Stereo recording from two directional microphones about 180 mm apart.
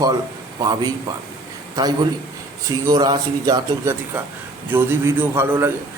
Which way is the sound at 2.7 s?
20° right (ahead or behind).